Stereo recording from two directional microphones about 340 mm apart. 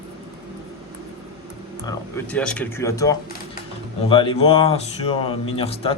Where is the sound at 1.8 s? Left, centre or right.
Centre.